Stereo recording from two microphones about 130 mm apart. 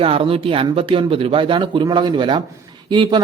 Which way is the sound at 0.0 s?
45° right (ahead or behind).